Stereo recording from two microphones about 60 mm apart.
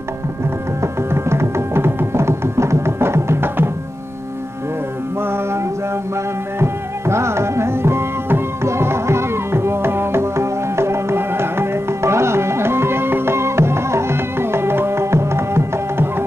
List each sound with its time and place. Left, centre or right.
1.1 s music: right
5.2 s music: right